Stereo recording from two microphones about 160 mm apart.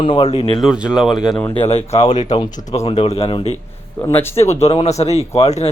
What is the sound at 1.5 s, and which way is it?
Speech, 40° left (ahead or behind).